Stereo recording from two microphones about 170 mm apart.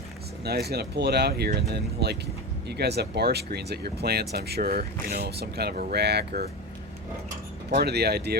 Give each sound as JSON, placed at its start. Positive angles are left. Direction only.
{"t": 0.4, "sound": "speech", "side_deg": -70}
{"t": 7.7, "sound": "speech", "side_deg": -70}